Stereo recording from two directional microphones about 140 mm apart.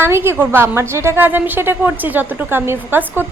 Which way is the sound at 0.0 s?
15° right (ahead or behind).